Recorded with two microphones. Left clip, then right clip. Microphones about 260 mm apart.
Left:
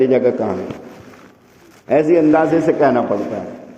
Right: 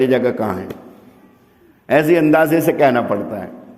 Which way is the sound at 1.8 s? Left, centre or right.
Right.